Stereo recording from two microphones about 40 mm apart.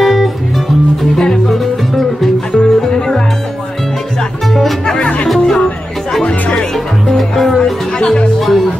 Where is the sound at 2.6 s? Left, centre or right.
Centre.